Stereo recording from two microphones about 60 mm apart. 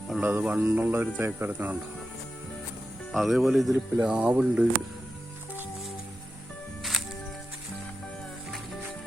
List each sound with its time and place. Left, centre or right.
0.2 s speech: right
3.1 s speech: centre
4.0 s speech: right